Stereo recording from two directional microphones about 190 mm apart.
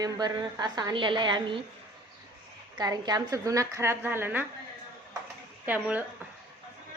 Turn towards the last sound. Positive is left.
turn(degrees=-10)  # may be behind; listen again after turning